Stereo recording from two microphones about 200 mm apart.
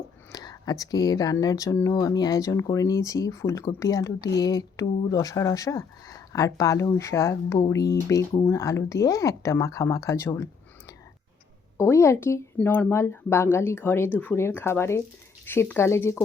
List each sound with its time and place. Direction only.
0.3 s speech: 20° left (ahead or behind)